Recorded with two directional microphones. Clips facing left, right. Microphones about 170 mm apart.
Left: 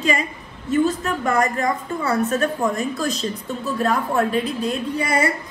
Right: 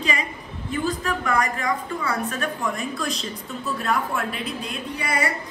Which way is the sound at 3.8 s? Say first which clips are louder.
Left 6 dB; 35° left (ahead or behind).